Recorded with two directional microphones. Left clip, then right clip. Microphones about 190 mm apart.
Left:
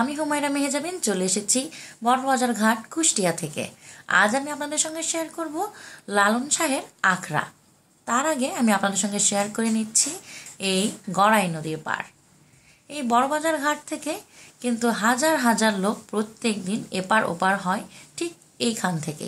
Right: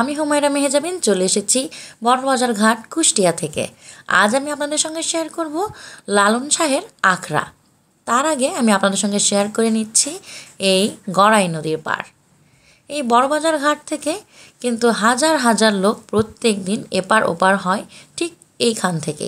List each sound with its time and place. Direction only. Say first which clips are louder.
0.0 s a woman's voice: right 7 dB; 45° right (ahead or behind)